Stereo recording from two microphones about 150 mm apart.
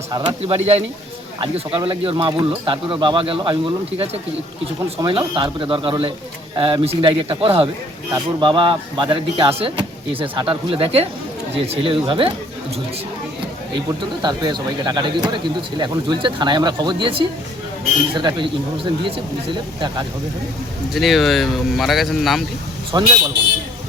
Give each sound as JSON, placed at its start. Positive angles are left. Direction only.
{"t": 0.1, "sound": "speech", "side_deg": -30}
{"t": 0.4, "sound": "speech", "side_deg": -45}
{"t": 14.2, "sound": "speech", "side_deg": -30}
{"t": 20.9, "sound": "speech", "side_deg": 0}
{"t": 22.9, "sound": "speech", "side_deg": -25}